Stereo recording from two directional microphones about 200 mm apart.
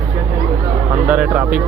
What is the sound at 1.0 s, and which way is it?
Speech, 5° right (ahead or behind).